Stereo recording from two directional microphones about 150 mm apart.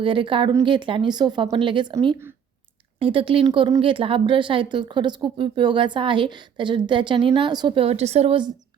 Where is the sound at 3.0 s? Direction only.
35° right (ahead or behind).